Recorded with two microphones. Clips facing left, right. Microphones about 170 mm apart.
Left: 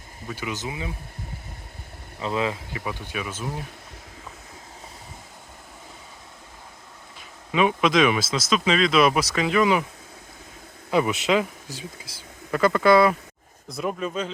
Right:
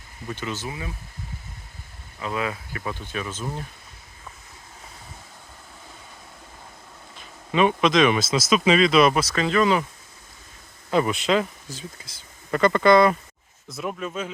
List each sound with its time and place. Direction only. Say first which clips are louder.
0.3 s speech: even; 10° left (ahead or behind)
2.1 s speech: left 2 dB; 25° left (ahead or behind)
2.8 s speech: right 1 dB; 15° left (ahead or behind)
7.5 s speech: right 1 dB; 5° left (ahead or behind)
10.9 s speech: even; 10° left (ahead or behind)